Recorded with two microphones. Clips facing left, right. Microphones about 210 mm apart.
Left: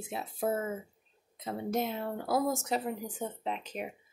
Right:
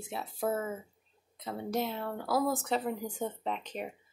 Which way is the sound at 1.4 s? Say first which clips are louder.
Left 1 dB; 20° left (ahead or behind).